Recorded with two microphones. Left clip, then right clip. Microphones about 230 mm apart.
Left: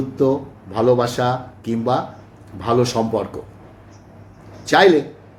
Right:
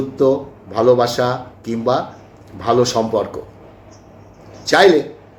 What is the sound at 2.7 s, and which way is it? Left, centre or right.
Speech, centre.